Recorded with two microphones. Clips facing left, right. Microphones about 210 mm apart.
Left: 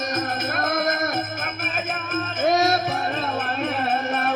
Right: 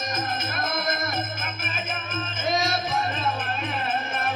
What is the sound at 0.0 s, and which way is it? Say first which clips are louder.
Music: left 4 dB; 65° left (ahead or behind).